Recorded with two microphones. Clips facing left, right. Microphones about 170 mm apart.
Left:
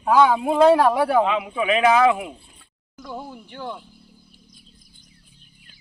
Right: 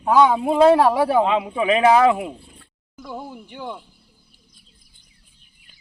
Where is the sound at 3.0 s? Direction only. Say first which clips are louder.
Right 1 dB; 10° right (ahead or behind).